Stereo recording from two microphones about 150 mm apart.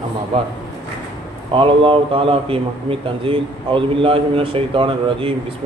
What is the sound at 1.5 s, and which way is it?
A man's voice, 35° right (ahead or behind).